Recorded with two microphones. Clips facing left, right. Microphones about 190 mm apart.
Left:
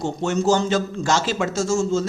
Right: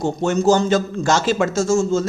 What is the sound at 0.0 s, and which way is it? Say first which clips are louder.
Speech: right 4 dB; 45° right (ahead or behind).